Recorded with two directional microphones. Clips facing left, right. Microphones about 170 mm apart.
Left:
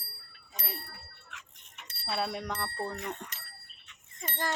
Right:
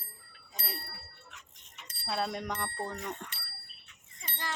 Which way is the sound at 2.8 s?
5° left (ahead or behind).